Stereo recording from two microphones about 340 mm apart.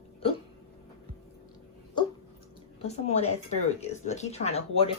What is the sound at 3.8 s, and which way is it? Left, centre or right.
Speech, centre.